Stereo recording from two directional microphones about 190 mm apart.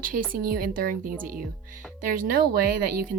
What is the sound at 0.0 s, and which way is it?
A woman's voice, 50° right (ahead or behind).